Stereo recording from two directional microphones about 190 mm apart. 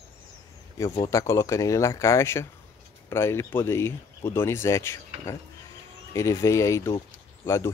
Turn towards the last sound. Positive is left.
turn(degrees=15)  # may be behind; listen again after turning